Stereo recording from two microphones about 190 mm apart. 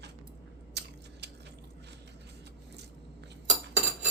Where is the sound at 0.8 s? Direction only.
65° right (ahead or behind).